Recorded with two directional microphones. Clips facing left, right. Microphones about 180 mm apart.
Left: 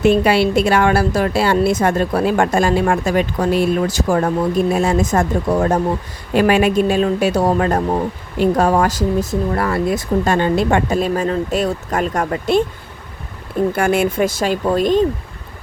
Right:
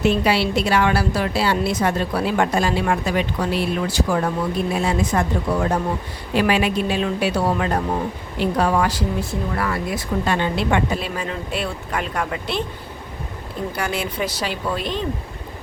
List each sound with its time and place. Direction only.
0.0 s a woman's voice: 50° left (ahead or behind)
13.7 s a woman's voice: 50° left (ahead or behind)